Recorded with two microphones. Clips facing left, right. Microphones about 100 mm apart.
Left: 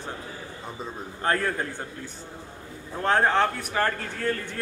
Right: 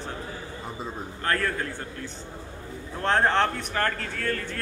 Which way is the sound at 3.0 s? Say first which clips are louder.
Left 1 dB; 5° left (ahead or behind).